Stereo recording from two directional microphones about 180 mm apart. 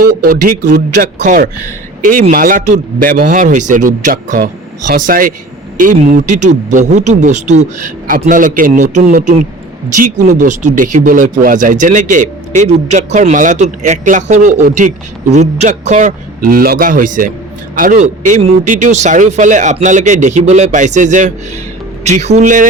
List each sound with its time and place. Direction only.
0.0 s speech: 50° right (ahead or behind)